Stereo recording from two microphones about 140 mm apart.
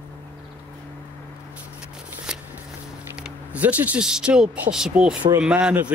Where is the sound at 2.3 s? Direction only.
5° right (ahead or behind).